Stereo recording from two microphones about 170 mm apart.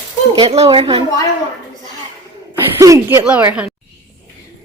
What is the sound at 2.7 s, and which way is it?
Speech, 15° right (ahead or behind).